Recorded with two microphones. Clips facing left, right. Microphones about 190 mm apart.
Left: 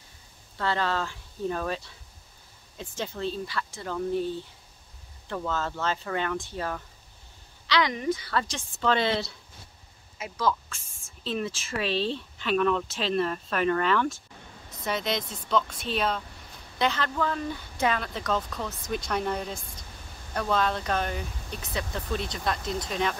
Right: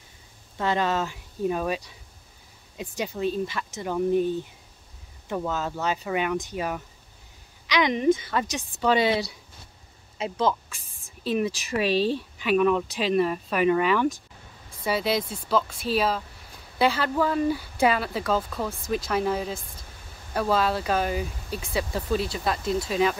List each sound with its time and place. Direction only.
0.6 s speech: 15° right (ahead or behind)
10.1 s speech: 30° right (ahead or behind)
10.8 s a sound: 35° right (ahead or behind)
11.2 s speech: 10° right (ahead or behind)